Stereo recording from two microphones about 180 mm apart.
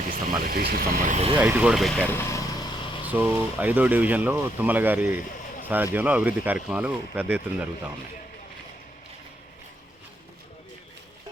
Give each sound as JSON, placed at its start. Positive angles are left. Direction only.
{"t": 0.0, "sound": "a sound", "side_deg": -55}
{"t": 1.1, "sound": "speech", "side_deg": -35}
{"t": 1.4, "sound": "speech", "side_deg": -10}
{"t": 2.3, "sound": "vehicle", "side_deg": 20}
{"t": 3.0, "sound": "speech", "side_deg": -10}